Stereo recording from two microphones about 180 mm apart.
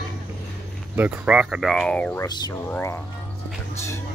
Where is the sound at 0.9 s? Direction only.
10° right (ahead or behind); by 2.2 s 5° left (ahead or behind).